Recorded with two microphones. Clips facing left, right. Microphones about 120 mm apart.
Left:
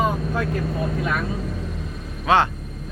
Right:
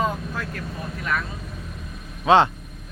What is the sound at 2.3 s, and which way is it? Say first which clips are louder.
Speech: right 2 dB; 25° right (ahead or behind).